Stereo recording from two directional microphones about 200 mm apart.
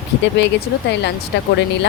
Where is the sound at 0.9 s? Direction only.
60° left (ahead or behind).